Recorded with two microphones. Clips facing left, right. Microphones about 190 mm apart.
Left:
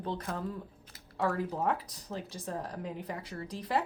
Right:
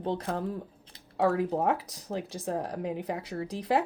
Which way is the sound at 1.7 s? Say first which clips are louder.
Right 4 dB; 80° right.